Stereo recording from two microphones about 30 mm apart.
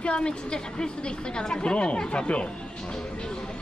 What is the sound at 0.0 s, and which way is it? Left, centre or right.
Speech, left.